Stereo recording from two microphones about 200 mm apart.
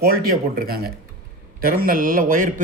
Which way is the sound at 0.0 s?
50° right (ahead or behind).